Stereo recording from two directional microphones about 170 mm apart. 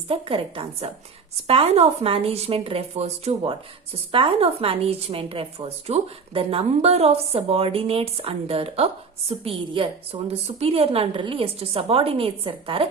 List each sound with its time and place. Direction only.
0.1 s a woman's voice: 30° right (ahead or behind)